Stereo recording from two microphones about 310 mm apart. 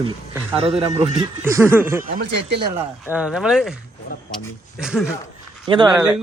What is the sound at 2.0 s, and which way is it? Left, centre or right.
Speech, right.